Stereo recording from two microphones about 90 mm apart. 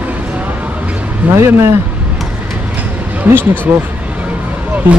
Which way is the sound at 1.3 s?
30° right (ahead or behind).